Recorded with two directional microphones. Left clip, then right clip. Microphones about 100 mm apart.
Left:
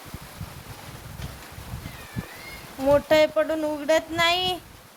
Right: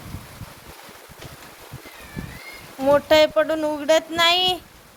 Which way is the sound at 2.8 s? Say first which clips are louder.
Right 3 dB; 5° right (ahead or behind).